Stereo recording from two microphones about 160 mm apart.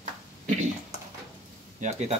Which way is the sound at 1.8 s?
45° right (ahead or behind).